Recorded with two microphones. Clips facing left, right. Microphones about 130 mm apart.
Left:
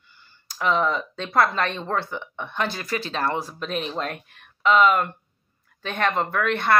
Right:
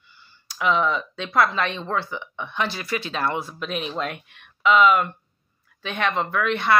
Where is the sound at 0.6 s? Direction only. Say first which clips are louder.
Right 1 dB; 40° left (ahead or behind).